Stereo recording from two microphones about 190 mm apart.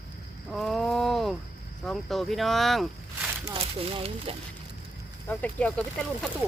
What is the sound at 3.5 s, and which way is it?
Speech, 30° right (ahead or behind).